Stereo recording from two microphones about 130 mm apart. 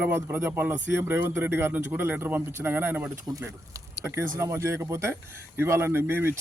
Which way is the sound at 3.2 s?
25° right (ahead or behind).